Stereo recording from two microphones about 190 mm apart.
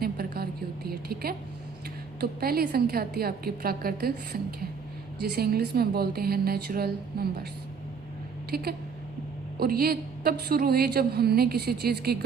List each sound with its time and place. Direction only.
0.0 s a sound: 55° right (ahead or behind)
0.9 s speech: 55° right (ahead or behind)
2.4 s a woman's voice: 55° right (ahead or behind)
8.4 s a woman's voice: 55° right (ahead or behind)